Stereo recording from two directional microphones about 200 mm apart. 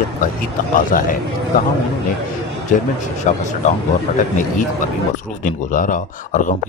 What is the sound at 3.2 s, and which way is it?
Speech, 35° left (ahead or behind).